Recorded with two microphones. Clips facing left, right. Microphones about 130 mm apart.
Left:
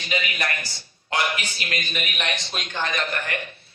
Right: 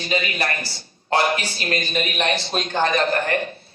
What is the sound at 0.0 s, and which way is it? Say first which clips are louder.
A man's voice: right 4 dB; 35° right (ahead or behind).